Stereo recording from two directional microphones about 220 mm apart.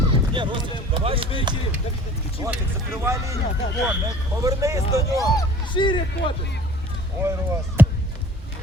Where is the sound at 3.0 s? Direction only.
15° right (ahead or behind).